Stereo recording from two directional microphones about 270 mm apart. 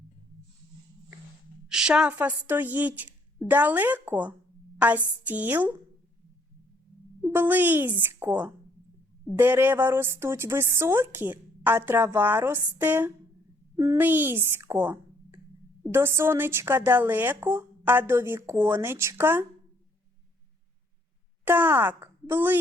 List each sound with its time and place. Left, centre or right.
1.7 s a woman's voice: centre
7.2 s a child's voice: centre
21.4 s speech: centre